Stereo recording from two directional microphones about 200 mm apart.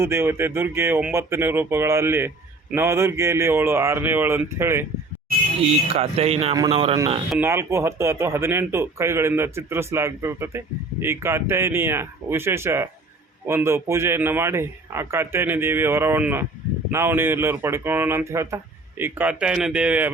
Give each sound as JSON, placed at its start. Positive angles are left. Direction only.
{"t": 0.0, "sound": "speech", "side_deg": -10}
{"t": 5.6, "sound": "speech", "side_deg": -30}
{"t": 7.3, "sound": "speech", "side_deg": -10}